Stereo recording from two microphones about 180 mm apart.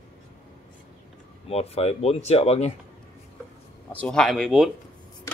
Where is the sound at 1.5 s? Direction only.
35° left (ahead or behind).